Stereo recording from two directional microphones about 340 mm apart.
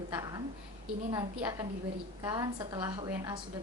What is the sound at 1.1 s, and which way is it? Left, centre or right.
A woman's voice, centre.